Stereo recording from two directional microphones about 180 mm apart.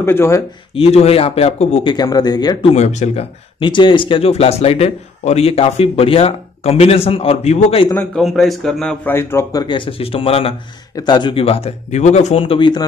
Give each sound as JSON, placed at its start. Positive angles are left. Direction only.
{"t": 0.0, "sound": "a man's voice", "side_deg": 15}
{"t": 0.7, "sound": "speech", "side_deg": 35}
{"t": 2.0, "sound": "speech", "side_deg": 20}
{"t": 2.7, "sound": "speech", "side_deg": 40}
{"t": 3.5, "sound": "speech", "side_deg": 25}
{"t": 8.1, "sound": "a man's voice", "side_deg": 0}